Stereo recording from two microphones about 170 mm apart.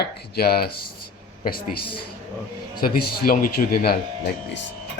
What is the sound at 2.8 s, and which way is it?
Speech, 60° left (ahead or behind).